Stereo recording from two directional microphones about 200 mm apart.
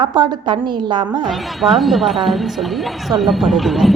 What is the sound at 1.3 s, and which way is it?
A woman's voice, centre (ahead or behind).